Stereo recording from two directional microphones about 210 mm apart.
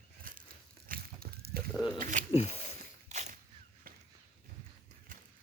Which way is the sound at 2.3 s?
30° left (ahead or behind).